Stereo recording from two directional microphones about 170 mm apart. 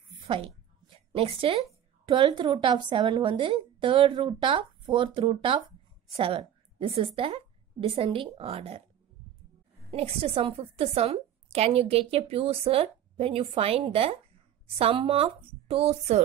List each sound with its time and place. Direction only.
0.8 s a sound: 35° right (ahead or behind)
2.0 s a woman's voice: 30° right (ahead or behind)
9.8 s a woman's voice: 35° right (ahead or behind)